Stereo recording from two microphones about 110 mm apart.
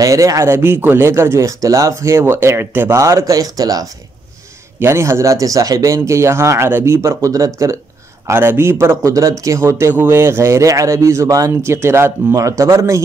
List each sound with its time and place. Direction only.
0.0 s speech: 30° right (ahead or behind)
4.7 s speech: 25° right (ahead or behind)